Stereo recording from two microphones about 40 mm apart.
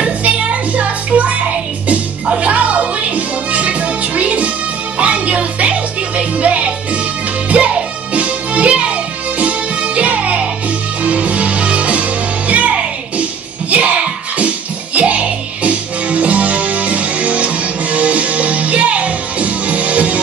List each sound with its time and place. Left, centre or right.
0.0 s music: right